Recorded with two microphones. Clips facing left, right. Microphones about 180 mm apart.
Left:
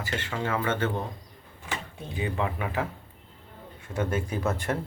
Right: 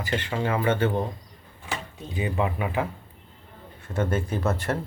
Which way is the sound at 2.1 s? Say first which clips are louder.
Right 3 dB; 10° right (ahead or behind).